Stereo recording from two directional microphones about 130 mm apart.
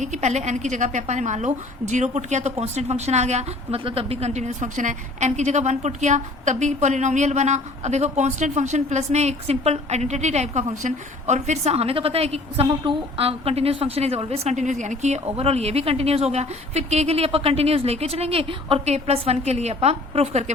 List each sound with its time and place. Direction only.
0.0 s a woman's voice: 65° right (ahead or behind)
3.8 s a woman's voice: 50° right (ahead or behind)